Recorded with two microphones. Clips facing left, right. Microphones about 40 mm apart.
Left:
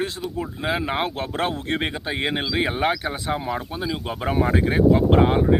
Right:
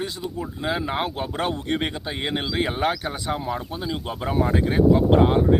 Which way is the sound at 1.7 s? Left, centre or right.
Centre.